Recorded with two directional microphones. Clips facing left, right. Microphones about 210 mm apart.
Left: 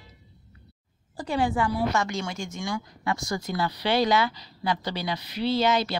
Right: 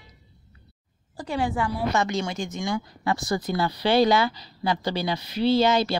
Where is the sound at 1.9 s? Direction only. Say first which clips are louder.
Right 3 dB; 20° right (ahead or behind).